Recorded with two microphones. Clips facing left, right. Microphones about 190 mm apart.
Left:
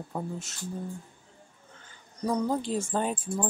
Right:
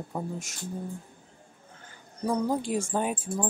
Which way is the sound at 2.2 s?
10° right (ahead or behind).